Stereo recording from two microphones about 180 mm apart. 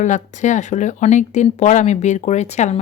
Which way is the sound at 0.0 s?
40° left (ahead or behind).